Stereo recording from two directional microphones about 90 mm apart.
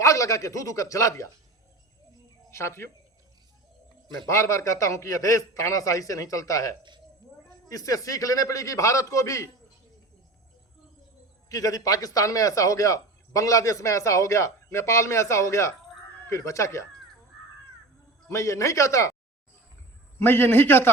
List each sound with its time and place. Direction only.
0.0 s a man's voice: 40° left (ahead or behind)
2.5 s speech: 30° left (ahead or behind)
4.3 s a man's voice: 35° left (ahead or behind)
11.4 s a man's voice: 40° left (ahead or behind)
18.3 s a man's voice: 35° left (ahead or behind)
20.1 s a man's voice: 25° left (ahead or behind)